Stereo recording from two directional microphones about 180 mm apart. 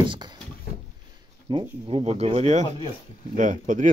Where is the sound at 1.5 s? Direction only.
25° right (ahead or behind).